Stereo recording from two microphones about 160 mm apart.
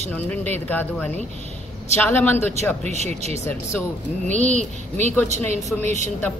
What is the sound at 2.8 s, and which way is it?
Speech, 45° right (ahead or behind).